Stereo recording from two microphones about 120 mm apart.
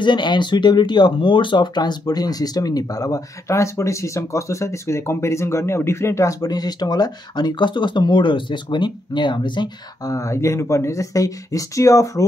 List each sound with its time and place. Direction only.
0.0 s speech: 40° left (ahead or behind)